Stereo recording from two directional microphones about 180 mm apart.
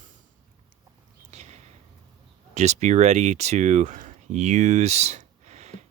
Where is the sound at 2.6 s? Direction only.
40° right (ahead or behind).